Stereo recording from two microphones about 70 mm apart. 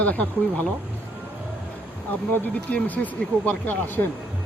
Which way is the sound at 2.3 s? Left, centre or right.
Left.